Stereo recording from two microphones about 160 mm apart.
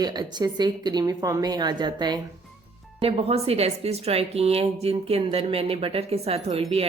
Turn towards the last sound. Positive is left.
turn(degrees=-40)  # may be behind; listen again after turning